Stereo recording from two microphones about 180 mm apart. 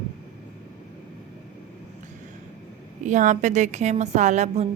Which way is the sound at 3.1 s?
45° right (ahead or behind).